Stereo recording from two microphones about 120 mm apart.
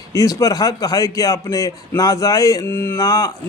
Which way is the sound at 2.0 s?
30° left (ahead or behind).